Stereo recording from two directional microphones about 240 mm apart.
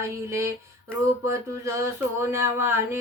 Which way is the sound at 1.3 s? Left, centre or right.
Centre.